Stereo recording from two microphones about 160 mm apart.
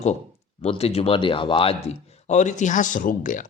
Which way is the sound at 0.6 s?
40° left (ahead or behind).